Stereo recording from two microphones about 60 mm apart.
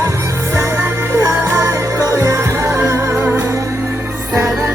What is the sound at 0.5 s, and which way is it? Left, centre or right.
Music, right.